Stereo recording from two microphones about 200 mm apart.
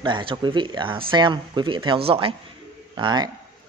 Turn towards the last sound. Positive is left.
turn(degrees=-20)  # may be behind; listen again after turning